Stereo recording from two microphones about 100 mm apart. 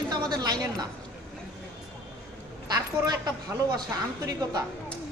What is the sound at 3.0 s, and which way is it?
Speech, 45° right (ahead or behind).